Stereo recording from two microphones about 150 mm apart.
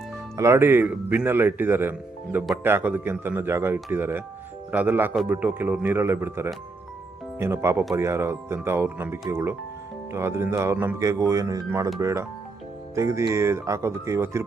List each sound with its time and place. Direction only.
0.3 s speech: 20° right (ahead or behind)